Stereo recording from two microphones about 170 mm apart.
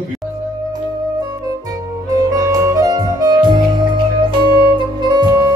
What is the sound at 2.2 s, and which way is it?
Music, 20° right (ahead or behind).